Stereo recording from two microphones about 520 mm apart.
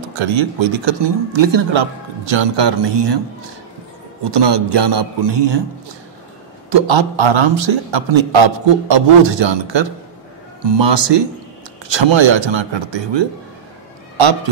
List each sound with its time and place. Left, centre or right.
0.1 s a man's voice: right
4.2 s a man's voice: right
6.7 s a man's voice: right